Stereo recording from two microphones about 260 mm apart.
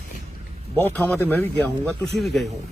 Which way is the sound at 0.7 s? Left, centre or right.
Centre.